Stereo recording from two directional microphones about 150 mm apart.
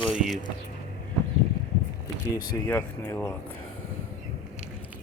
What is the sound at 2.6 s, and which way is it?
Speech, 15° left (ahead or behind).